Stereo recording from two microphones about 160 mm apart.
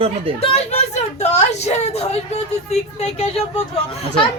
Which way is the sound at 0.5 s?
45° left (ahead or behind).